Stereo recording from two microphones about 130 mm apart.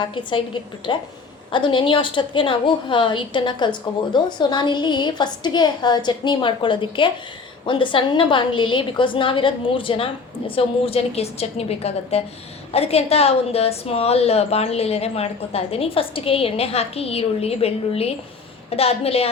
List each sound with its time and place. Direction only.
0.0 s a woman's voice: 40° left (ahead or behind)